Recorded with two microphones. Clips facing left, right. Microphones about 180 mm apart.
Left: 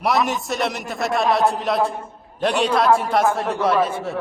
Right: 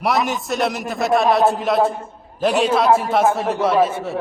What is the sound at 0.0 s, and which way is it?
A man's voice, centre (ahead or behind).